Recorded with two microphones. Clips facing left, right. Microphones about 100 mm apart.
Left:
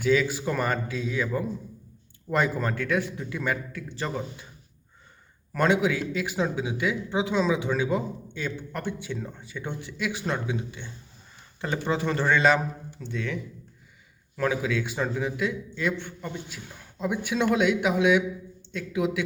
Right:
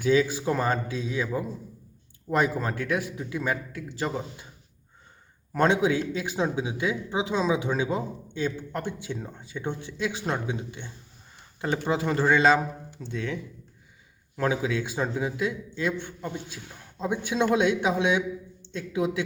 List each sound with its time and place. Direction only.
0.0 s a man's voice: 20° right (ahead or behind)
5.5 s a man's voice: 25° right (ahead or behind)